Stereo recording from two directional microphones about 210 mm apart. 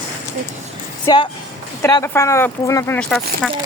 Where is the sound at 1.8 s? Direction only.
15° left (ahead or behind).